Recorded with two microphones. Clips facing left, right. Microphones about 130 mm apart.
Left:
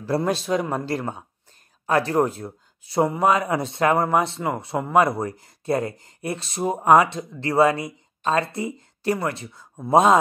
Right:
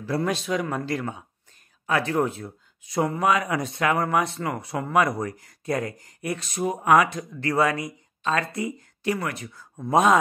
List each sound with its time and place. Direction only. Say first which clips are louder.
0.0 s speech: left 3 dB; 35° left (ahead or behind)